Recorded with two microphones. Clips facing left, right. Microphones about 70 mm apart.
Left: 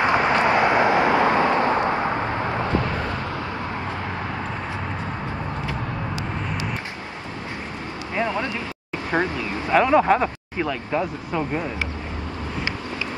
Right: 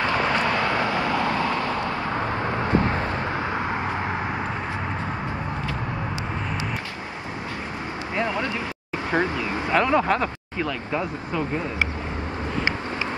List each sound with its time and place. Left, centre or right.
0.0 s vehicle: left
8.2 s vehicle: left
9.8 s speech: centre